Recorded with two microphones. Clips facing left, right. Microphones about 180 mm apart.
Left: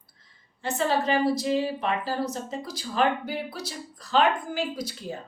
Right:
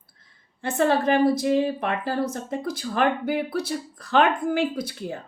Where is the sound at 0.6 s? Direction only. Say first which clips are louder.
Right 4 dB; 55° right (ahead or behind).